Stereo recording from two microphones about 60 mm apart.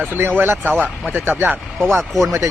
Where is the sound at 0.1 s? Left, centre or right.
Right.